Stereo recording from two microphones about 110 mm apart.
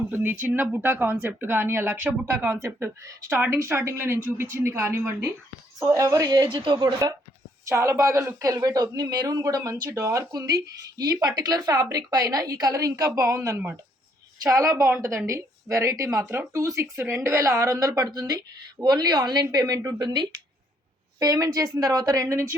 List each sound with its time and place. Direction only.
0.1 s speech: 20° right (ahead or behind); by 6.8 s 40° right (ahead or behind)
7.7 s speech: 25° right (ahead or behind)